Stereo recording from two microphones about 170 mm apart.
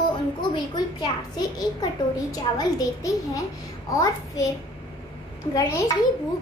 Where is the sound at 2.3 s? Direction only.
20° left (ahead or behind).